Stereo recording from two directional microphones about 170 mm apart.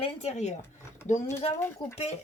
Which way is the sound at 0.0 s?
40° left (ahead or behind).